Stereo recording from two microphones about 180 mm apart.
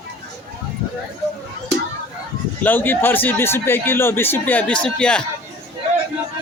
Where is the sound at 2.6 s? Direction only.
10° left (ahead or behind).